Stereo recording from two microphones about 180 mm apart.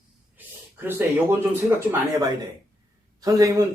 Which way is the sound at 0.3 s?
10° right (ahead or behind).